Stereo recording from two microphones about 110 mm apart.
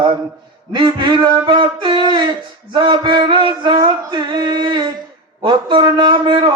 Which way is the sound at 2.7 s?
45° right (ahead or behind).